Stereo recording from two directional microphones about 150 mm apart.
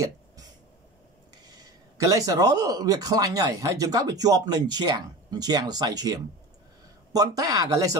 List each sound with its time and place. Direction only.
1.3 s speech: 25° right (ahead or behind)